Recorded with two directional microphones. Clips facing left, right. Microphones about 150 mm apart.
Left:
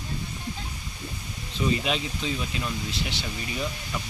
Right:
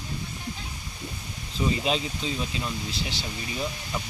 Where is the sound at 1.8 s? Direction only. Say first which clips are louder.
Right 1 dB; 35° right (ahead or behind).